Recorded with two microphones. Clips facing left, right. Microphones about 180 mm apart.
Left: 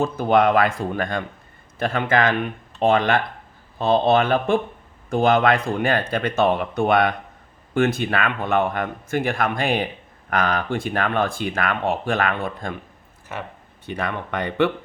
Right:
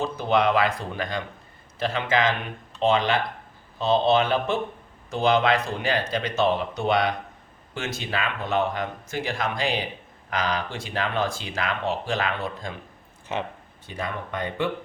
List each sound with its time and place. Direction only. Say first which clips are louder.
0.0 s speech: left 5 dB; 50° left (ahead or behind)
13.8 s speech: left 5 dB; 70° left (ahead or behind)